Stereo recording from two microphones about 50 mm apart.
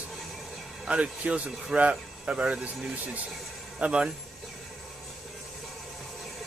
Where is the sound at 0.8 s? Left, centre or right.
Right.